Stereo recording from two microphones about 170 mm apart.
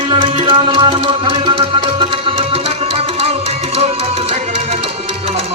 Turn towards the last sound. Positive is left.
turn(degrees=-35)  # may be behind; listen again after turning